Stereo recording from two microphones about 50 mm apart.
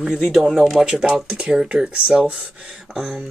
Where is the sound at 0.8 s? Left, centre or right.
Right.